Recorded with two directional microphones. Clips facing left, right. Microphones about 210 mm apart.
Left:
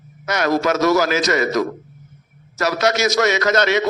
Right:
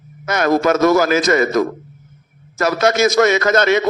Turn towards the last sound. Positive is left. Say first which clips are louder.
# right 3 dB
turn(degrees=-50)  # may be behind; listen again after turning